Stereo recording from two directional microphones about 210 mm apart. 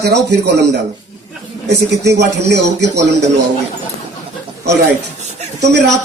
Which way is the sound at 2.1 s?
55° right (ahead or behind).